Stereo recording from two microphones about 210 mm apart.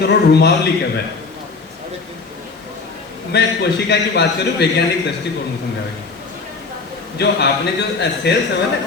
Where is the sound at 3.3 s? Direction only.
55° left (ahead or behind).